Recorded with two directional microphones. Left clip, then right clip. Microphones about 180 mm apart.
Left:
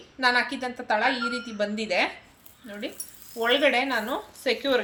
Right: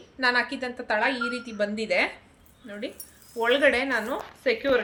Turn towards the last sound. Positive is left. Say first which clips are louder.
# right 1 dB
turn(degrees=-10)  # may be behind; listen again after turning